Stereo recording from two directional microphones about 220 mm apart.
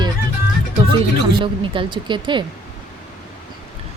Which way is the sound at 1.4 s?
20° right (ahead or behind).